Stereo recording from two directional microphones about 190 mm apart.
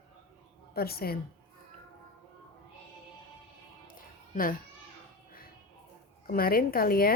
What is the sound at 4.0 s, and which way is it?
Music, 45° left (ahead or behind).